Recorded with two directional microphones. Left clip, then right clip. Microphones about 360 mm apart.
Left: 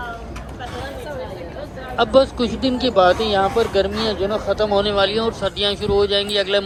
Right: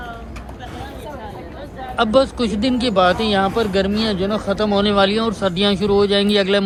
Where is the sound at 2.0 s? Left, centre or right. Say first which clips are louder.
Left 1 dB; centre.